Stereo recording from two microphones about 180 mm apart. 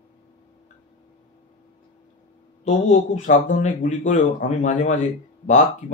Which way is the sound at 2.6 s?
40° left (ahead or behind).